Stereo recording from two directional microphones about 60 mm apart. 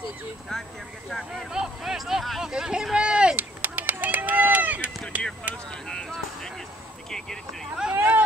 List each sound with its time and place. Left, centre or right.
0.5 s speech: centre
1.5 s speech: centre
2.5 s a sound: centre
3.3 s run: right
5.1 s speech: right
5.7 s speech: centre
6.0 s music: centre
7.1 s speech: centre
7.9 s a sound: right